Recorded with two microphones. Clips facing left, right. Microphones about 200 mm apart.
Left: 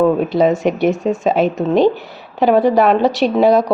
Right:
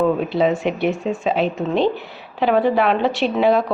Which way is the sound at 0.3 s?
45° left (ahead or behind).